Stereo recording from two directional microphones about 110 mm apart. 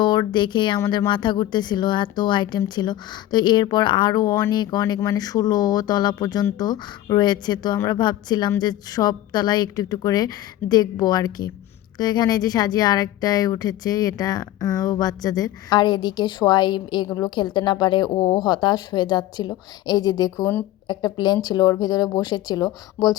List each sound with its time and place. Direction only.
0.0 s a woman's voice: 40° left (ahead or behind)